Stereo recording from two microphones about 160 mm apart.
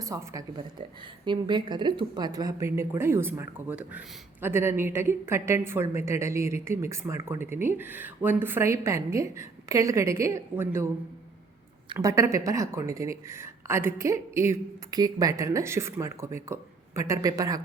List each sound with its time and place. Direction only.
0.0 s speech: 20° right (ahead or behind)
0.8 s a woman's voice: 30° right (ahead or behind); by 10.8 s 15° right (ahead or behind)
11.9 s a woman's voice: 20° right (ahead or behind)